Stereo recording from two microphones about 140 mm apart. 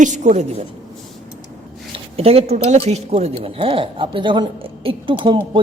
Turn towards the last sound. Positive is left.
turn(degrees=-35)  # may be behind; listen again after turning